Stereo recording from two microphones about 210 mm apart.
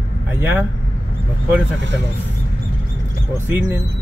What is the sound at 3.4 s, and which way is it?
Speech, 10° right (ahead or behind).